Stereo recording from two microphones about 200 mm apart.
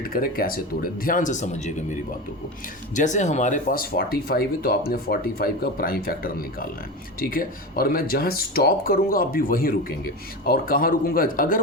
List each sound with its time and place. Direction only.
0.0 s speech: 45° left (ahead or behind)